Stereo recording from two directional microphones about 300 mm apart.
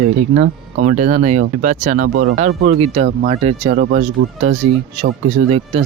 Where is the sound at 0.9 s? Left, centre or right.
Right.